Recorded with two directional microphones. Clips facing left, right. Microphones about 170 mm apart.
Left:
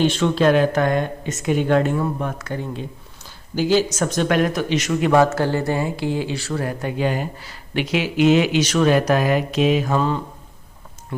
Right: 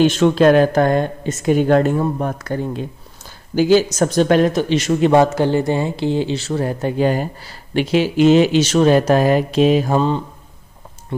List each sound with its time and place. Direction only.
0.0 s speech: 45° right (ahead or behind); by 10.2 s 25° right (ahead or behind)